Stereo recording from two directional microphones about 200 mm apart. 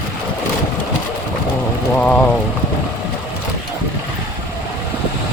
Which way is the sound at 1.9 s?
5° left (ahead or behind).